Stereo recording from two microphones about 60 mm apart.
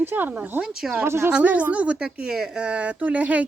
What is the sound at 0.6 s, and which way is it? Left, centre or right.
Speech, centre.